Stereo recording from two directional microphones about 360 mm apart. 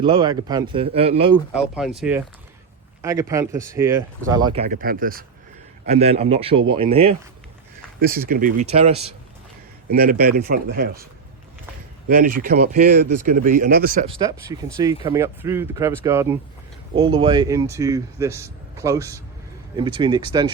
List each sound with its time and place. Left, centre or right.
0.0 s speech: centre
1.5 s speech: centre
4.6 s speech: right
12.0 s speech: right
14.2 s speech: centre